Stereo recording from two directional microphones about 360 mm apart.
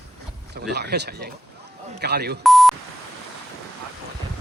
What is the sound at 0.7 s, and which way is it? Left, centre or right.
Speech, right.